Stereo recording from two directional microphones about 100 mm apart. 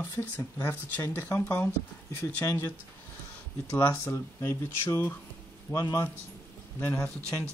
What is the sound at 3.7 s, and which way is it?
A man's voice, 25° left (ahead or behind).